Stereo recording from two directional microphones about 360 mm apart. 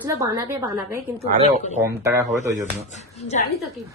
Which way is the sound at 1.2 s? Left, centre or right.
Centre.